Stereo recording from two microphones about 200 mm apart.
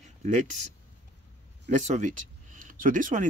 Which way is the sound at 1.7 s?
35° right (ahead or behind).